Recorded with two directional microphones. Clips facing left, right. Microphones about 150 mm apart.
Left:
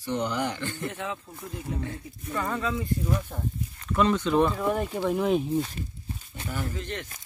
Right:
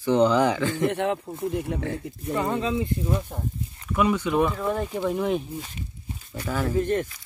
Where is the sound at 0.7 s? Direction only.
75° right (ahead or behind).